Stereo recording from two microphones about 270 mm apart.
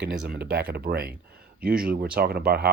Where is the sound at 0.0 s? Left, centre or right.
Right.